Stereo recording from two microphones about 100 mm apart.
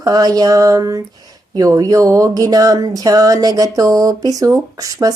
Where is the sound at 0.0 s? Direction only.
40° right (ahead or behind).